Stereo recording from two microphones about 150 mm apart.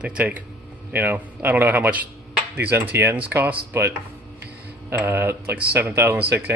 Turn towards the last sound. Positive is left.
turn(degrees=-15)  # may be behind; listen again after turning